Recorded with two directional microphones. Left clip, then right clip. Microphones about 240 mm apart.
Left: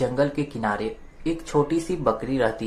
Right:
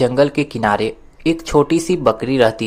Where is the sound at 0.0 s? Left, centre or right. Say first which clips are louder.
Right 9 dB; right.